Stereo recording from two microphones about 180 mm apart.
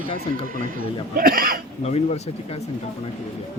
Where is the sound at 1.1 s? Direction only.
50° right (ahead or behind).